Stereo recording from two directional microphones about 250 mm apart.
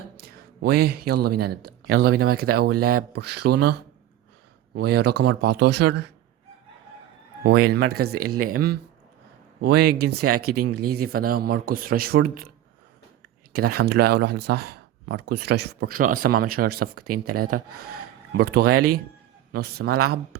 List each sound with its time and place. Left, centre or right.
0.2 s a man's voice: right
4.7 s a man's voice: right
7.4 s a man's voice: right
8.2 s speech: right
8.4 s a man's voice: right
10.4 s speech: right
10.8 s a man's voice: right
13.5 s a man's voice: right